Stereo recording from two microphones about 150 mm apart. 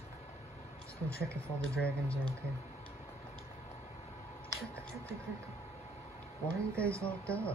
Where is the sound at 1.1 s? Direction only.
90° left.